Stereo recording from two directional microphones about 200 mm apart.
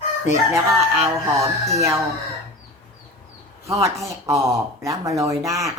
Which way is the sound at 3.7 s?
15° right (ahead or behind).